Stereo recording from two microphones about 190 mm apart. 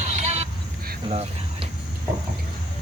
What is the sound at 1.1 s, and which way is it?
Cricket, 30° right (ahead or behind).